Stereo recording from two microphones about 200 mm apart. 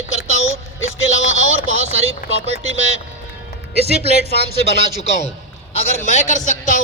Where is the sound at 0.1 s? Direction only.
80° left.